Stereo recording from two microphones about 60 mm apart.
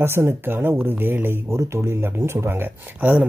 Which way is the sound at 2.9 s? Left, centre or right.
Right.